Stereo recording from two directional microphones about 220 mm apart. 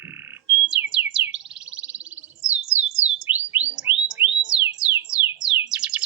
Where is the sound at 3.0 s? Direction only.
30° right (ahead or behind).